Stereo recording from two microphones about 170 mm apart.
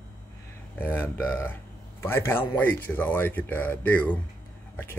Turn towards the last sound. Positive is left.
turn(degrees=10)  # may be behind; listen again after turning